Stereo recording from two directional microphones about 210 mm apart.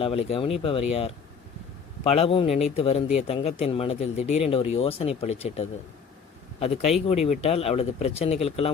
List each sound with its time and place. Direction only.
0.0 s speech: 25° left (ahead or behind)